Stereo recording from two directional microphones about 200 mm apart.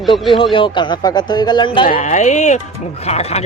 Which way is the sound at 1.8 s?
40° left (ahead or behind).